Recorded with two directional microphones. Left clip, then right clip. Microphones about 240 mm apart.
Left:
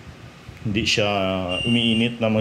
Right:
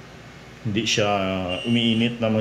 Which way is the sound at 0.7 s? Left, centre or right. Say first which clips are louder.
Left 1 dB; left.